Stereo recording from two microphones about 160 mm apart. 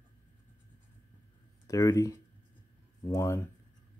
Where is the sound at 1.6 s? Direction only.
20° left (ahead or behind).